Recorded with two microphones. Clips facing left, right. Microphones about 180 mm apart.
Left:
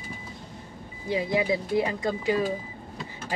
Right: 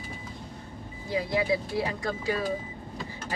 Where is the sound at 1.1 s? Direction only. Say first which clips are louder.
Left 2 dB; 20° left (ahead or behind).